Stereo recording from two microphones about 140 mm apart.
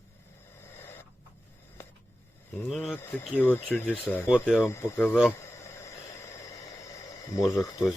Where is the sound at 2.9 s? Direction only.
15° left (ahead or behind).